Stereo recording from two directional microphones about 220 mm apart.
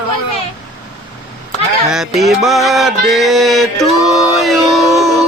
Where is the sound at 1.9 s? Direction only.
Centre (ahead or behind).